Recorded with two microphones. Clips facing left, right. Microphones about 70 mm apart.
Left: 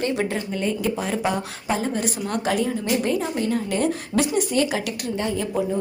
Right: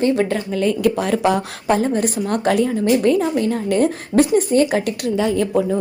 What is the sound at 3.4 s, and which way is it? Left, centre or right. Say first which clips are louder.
Speech: right 5 dB; right.